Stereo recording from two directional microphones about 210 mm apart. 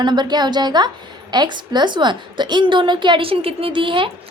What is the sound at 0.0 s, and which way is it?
A woman's voice, 20° right (ahead or behind).